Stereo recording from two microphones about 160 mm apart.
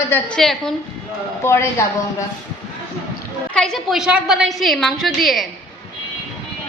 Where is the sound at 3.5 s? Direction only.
5° left (ahead or behind).